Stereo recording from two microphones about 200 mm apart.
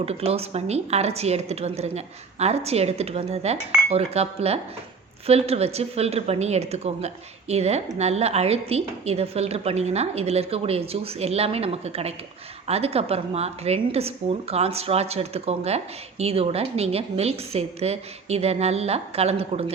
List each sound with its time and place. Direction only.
0.0 s speech: 30° right (ahead or behind)